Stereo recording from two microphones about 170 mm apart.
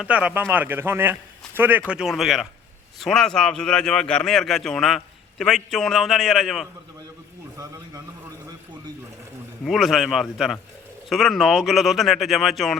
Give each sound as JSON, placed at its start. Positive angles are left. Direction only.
{"t": 0.0, "sound": "a man's voice", "side_deg": -5}
{"t": 7.5, "sound": "a sound", "side_deg": -20}
{"t": 9.6, "sound": "a man's voice", "side_deg": 0}